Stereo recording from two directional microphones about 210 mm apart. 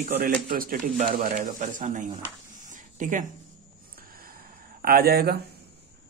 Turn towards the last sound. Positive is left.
turn(degrees=-50)  # may be behind; listen again after turning